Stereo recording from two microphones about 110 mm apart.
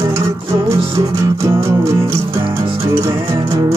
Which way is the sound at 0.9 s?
25° right (ahead or behind).